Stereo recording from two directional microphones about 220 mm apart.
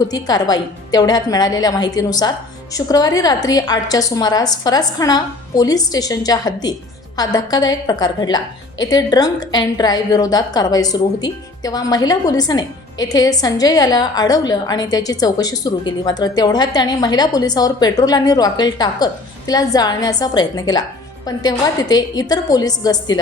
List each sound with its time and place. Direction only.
0.1 s a woman's voice: 15° left (ahead or behind)